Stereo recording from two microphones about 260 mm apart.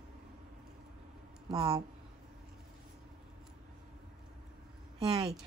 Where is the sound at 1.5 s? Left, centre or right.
Centre.